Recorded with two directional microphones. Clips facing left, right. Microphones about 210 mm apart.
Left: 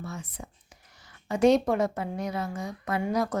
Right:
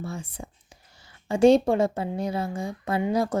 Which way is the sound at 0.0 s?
30° right (ahead or behind).